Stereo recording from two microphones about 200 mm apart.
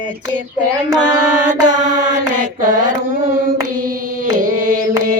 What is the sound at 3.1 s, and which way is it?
Hands, 45° right (ahead or behind).